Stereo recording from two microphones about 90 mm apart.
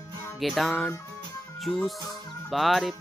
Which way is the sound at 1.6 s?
Centre (ahead or behind).